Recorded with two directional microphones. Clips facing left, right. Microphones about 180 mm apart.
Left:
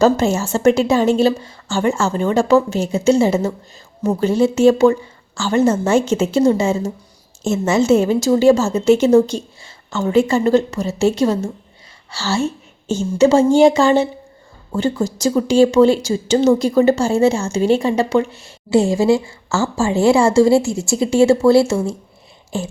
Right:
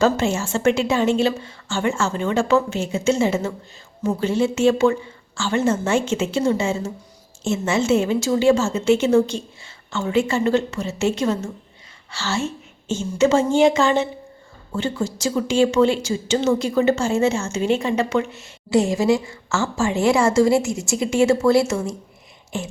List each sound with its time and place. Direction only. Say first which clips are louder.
0.0 s a woman's voice: left 4 dB; 40° left (ahead or behind)